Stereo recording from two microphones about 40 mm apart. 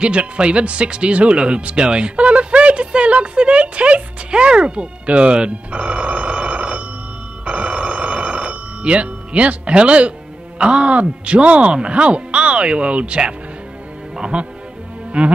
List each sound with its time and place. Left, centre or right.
0.0 s speech: right
7.4 s telephone bell ringing: right
10.6 s speech: right
14.3 s speech: right